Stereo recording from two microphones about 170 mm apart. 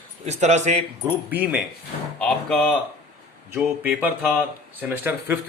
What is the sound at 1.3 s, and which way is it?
Speech, 10° right (ahead or behind).